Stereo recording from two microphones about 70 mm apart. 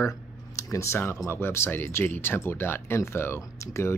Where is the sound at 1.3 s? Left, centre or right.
Left.